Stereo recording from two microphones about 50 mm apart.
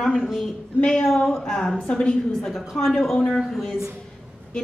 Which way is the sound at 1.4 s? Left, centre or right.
Centre.